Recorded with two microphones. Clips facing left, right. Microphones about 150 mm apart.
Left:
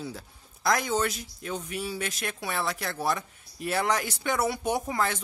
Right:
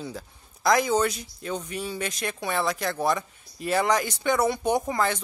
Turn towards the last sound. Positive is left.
turn(degrees=0)  # may be behind; listen again after turning